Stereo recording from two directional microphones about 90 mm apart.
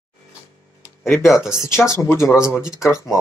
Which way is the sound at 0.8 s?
25° left (ahead or behind).